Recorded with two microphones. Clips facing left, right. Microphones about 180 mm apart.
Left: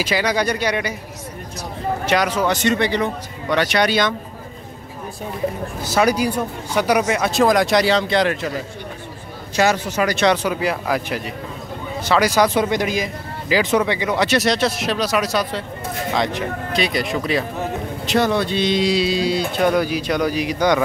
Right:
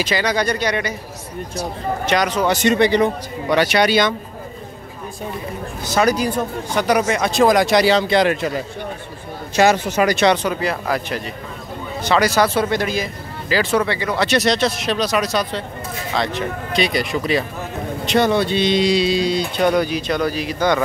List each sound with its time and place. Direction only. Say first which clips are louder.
0.0 s speech: even; 10° left (ahead or behind)
2.0 s speech: right 1 dB; 5° left (ahead or behind)
2.5 s a man's voice: right 3 dB; 15° right (ahead or behind)
5.9 s speech: even; 10° left (ahead or behind); by 8.4 s 10° right (ahead or behind)
9.6 s a man's voice: right 3 dB; 20° right (ahead or behind)
10.2 s speech: right 1 dB; 5° left (ahead or behind)
16.7 s speech: right 2 dB; centre (ahead or behind)